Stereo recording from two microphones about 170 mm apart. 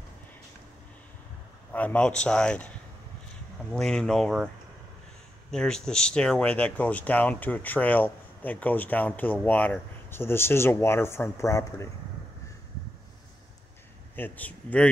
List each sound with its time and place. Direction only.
1.7 s speech: 10° left (ahead or behind)
3.7 s speech: 5° left (ahead or behind)
5.5 s speech: 5° left (ahead or behind)
14.1 s speech: 10° left (ahead or behind)